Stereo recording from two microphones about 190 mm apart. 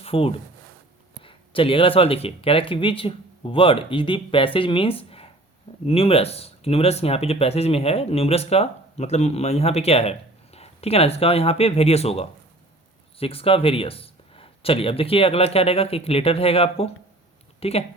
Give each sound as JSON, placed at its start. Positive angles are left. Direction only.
{"t": 0.0, "sound": "speech", "side_deg": 30}